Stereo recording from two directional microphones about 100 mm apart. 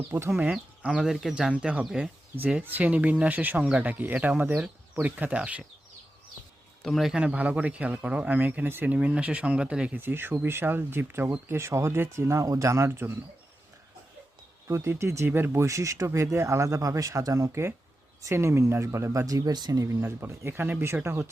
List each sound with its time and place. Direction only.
0.1 s speech: 25° right (ahead or behind)
0.3 s a man's voice: 15° right (ahead or behind)
6.8 s a man's voice: centre (ahead or behind)
10.0 s speech: 20° right (ahead or behind)
14.7 s speech: 30° right (ahead or behind)
20.0 s speech: 25° right (ahead or behind)